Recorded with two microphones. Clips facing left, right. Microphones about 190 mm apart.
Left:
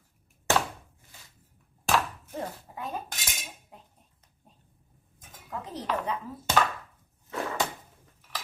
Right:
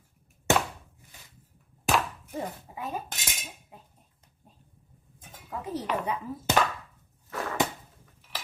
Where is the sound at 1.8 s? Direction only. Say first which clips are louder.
Even; 15° right (ahead or behind).